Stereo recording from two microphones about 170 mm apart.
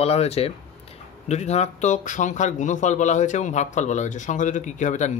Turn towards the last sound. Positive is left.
turn(degrees=45)  # may be behind; listen again after turning